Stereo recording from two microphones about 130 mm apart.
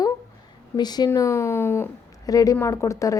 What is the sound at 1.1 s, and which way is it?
A woman's voice, 20° left (ahead or behind).